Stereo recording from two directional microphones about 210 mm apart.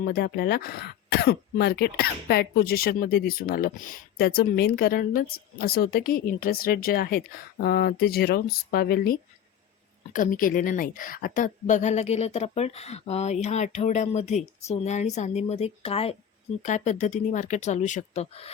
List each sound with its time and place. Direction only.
0.0 s a woman's voice: 50° left (ahead or behind); by 18.5 s 30° left (ahead or behind)